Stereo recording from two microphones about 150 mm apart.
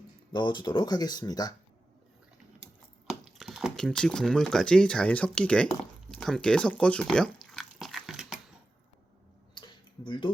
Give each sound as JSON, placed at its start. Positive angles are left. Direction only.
{"t": 0.3, "sound": "speech", "side_deg": 30}
{"t": 3.1, "sound": "speech", "side_deg": 0}
{"t": 7.5, "sound": "dog", "side_deg": 0}
{"t": 9.6, "sound": "tick-tock", "side_deg": 35}